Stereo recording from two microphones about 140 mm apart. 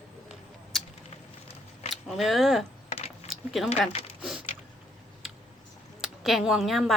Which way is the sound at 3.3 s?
Centre (ahead or behind).